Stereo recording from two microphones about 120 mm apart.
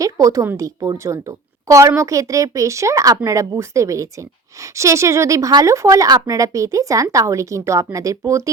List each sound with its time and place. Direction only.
0.0 s a woman's voice: 30° right (ahead or behind)